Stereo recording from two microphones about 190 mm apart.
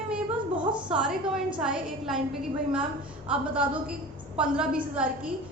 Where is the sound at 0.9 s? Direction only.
5° right (ahead or behind).